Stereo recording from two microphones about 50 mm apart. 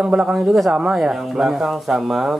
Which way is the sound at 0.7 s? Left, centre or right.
Centre.